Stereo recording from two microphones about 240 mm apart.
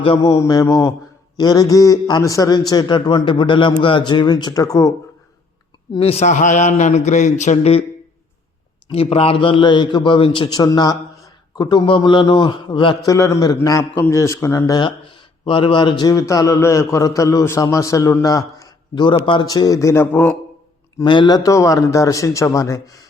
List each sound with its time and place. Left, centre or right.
0.0 s a man's voice: left
8.9 s a man's voice: left; by 20.3 s centre
21.0 s a man's voice: centre